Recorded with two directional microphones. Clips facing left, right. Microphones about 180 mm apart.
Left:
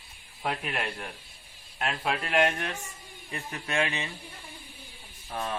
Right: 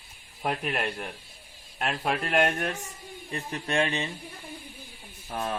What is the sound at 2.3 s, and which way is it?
Speech, 45° right (ahead or behind).